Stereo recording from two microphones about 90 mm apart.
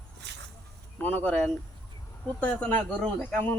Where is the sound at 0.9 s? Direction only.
20° left (ahead or behind).